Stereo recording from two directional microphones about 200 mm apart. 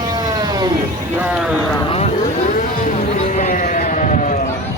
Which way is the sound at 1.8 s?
30° left (ahead or behind).